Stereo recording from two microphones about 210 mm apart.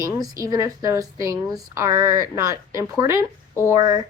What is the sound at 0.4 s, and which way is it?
Speech, 15° right (ahead or behind).